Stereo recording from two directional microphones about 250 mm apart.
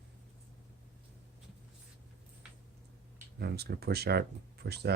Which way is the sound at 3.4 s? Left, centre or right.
Right.